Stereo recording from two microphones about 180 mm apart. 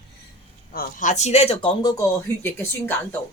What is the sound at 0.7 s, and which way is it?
A woman's voice, 50° left (ahead or behind).